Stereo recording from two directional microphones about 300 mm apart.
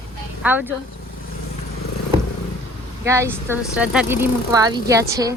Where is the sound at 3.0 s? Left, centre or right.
Centre.